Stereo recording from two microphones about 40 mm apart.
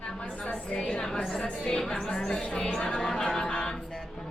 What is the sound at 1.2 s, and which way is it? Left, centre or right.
A woman's voice, centre.